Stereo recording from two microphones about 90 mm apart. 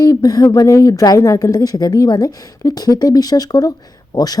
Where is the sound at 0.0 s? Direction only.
45° left (ahead or behind).